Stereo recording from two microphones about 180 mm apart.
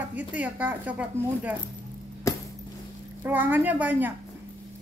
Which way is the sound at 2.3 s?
20° left (ahead or behind).